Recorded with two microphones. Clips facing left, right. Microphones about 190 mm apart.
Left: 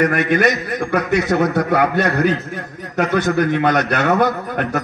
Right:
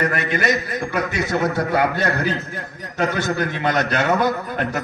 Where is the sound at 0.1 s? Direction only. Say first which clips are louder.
Left 5 dB; 55° left (ahead or behind).